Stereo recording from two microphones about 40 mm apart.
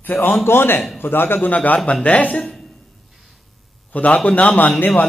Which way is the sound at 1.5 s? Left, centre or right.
Left.